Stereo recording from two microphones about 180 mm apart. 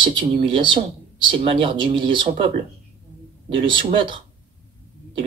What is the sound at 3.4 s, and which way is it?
Speech, 25° right (ahead or behind).